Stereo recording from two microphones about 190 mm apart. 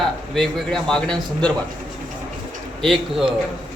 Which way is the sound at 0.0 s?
Centre (ahead or behind).